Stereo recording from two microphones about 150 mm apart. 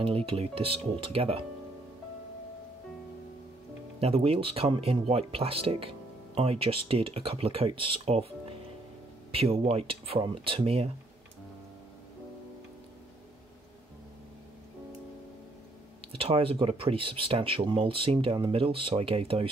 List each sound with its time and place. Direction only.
0.0 s speech: 35° right (ahead or behind)
4.0 s speech: 40° right (ahead or behind)
16.1 s speech: 40° right (ahead or behind)